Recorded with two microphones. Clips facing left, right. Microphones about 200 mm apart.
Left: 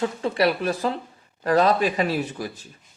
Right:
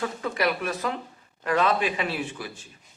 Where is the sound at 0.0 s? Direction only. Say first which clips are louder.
Left 5 dB; 30° left (ahead or behind).